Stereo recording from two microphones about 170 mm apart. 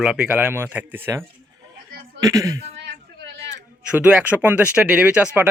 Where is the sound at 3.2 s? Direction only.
90° right.